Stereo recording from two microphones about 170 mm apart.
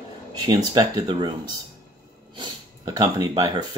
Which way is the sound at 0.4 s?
25° right (ahead or behind).